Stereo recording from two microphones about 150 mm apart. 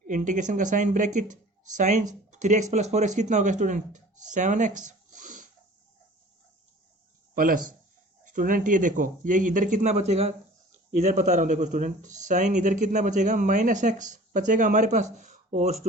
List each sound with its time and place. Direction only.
0.1 s speech: 55° right (ahead or behind)
4.9 s a sound: 55° right (ahead or behind)
7.3 s speech: 70° right (ahead or behind); by 15.9 s 45° right (ahead or behind)